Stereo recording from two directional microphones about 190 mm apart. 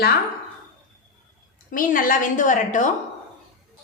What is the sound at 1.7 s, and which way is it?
A woman's voice, 45° left (ahead or behind).